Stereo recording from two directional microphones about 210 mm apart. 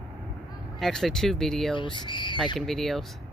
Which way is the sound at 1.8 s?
20° left (ahead or behind).